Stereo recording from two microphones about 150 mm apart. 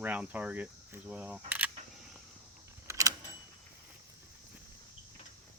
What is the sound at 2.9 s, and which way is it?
Keys jangling, 20° right (ahead or behind).